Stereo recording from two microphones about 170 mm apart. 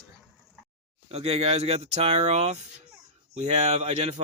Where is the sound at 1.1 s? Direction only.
35° right (ahead or behind).